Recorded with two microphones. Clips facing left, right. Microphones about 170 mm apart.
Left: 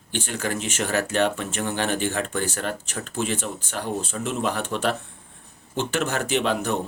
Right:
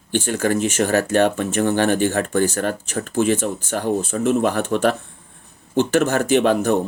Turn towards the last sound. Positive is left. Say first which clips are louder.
# right 7 dB
turn(degrees=-45)  # may be behind; listen again after turning